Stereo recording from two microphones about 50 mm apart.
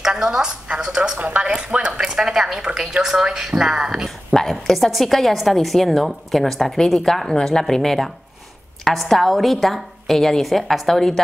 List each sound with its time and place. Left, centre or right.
0.0 s a woman's voice: centre
1.1 s a woman's voice: right; by 4.1 s centre
4.3 s a woman's voice: centre